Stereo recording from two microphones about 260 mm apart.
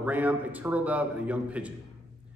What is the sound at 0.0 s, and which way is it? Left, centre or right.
A man's voice, centre.